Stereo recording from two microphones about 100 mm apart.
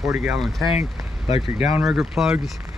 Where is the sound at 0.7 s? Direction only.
90° left.